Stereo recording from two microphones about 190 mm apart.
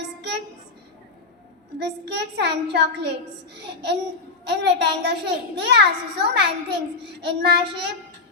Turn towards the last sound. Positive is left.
turn(degrees=-65)  # may be behind; listen again after turning